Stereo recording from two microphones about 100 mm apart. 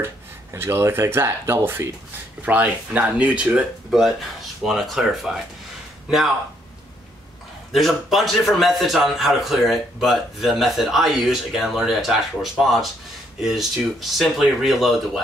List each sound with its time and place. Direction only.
0.0 s a man's voice: 25° right (ahead or behind); by 5.4 s 5° right (ahead or behind)
7.7 s a man's voice: centre (ahead or behind)